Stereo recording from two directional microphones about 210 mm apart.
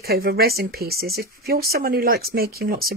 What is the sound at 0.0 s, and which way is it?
Speech, 50° right (ahead or behind).